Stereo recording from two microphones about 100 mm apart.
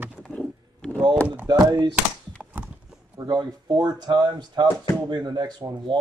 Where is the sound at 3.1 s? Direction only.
45° right (ahead or behind).